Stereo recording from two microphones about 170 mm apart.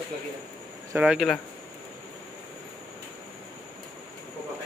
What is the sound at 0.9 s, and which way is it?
Speech, 5° right (ahead or behind).